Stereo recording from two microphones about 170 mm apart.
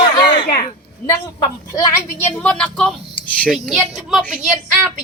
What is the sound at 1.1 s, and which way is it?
A woman's voice, 20° left (ahead or behind).